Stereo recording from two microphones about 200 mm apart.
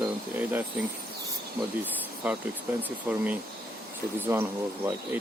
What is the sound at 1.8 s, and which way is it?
Speech, 5° right (ahead or behind).